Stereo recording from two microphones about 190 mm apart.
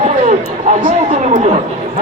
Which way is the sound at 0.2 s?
40° right (ahead or behind).